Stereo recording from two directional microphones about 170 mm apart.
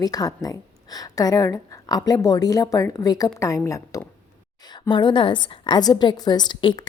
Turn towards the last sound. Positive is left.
turn(degrees=30)  # may be behind; listen again after turning